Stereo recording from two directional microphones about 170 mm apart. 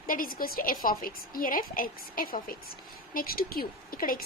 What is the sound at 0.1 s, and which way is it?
Speech, 55° left (ahead or behind).